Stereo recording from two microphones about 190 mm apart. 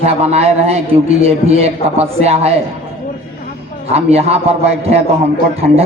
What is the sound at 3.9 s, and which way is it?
A man's voice, 35° right (ahead or behind).